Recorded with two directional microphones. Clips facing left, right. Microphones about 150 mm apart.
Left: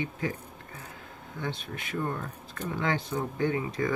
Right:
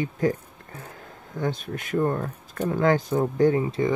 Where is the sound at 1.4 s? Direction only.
45° right (ahead or behind).